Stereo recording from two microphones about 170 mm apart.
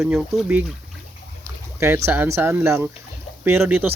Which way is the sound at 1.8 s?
15° right (ahead or behind).